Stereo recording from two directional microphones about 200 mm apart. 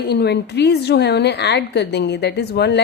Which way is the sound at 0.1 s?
55° left (ahead or behind).